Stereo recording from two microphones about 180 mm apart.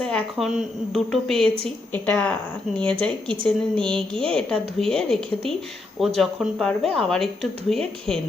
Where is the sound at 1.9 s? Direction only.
10° left (ahead or behind).